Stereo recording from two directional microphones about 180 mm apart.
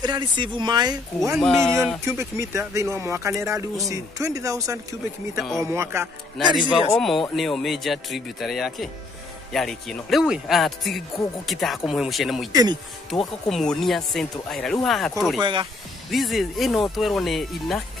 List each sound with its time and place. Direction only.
0.0 s speech: 25° right (ahead or behind)
1.4 s speech: 5° left (ahead or behind)
2.0 s speech: 15° right (ahead or behind)
5.4 s speech: centre (ahead or behind)
5.7 s speech: 15° right (ahead or behind)
6.3 s speech: centre (ahead or behind)
6.7 s speech: 25° left (ahead or behind)
7.3 s speech: centre (ahead or behind)
15.4 s speech: 25° right (ahead or behind)
16.1 s speech: centre (ahead or behind)